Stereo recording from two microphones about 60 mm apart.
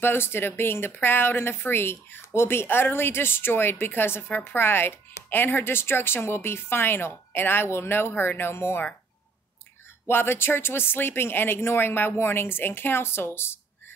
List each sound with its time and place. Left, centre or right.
0.0 s speech: left
10.0 s speech: left